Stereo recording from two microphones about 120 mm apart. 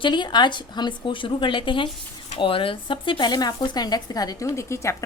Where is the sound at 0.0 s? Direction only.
40° left (ahead or behind).